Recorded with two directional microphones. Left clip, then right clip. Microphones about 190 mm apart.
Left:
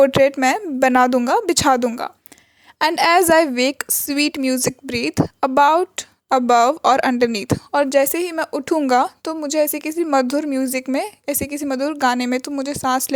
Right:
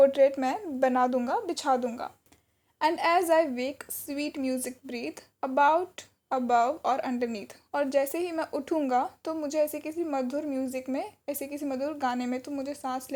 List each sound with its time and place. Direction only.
0.0 s a woman's voice: 50° left (ahead or behind)